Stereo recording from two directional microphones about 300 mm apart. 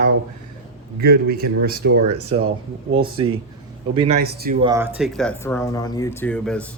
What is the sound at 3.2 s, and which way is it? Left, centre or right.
Speech, centre.